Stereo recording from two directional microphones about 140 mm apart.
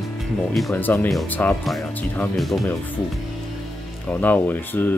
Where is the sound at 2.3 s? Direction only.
Centre (ahead or behind).